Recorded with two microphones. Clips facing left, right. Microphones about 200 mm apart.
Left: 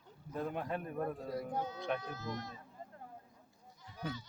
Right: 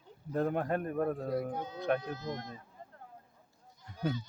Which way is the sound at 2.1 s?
20° right (ahead or behind).